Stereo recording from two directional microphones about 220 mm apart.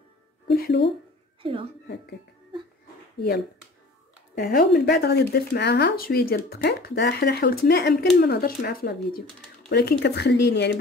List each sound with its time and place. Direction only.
0.6 s speech: 45° left (ahead or behind)
1.4 s a woman's voice: 25° right (ahead or behind)
4.4 s speech: 40° left (ahead or behind)